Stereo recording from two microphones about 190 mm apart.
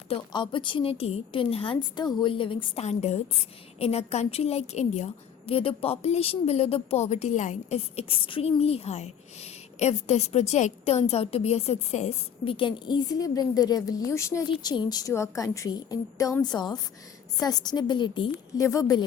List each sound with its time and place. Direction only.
0.1 s a woman's voice: 25° left (ahead or behind)